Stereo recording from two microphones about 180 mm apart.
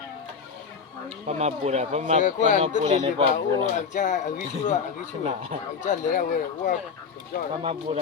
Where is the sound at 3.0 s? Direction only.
25° right (ahead or behind).